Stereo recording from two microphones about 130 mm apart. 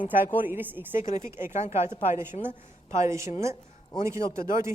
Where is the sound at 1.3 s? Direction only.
20° right (ahead or behind).